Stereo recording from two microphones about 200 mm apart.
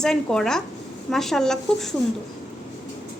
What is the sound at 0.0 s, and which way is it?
A woman's voice, 5° left (ahead or behind).